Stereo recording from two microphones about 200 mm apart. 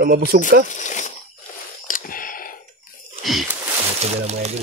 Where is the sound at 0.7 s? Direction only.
40° left (ahead or behind).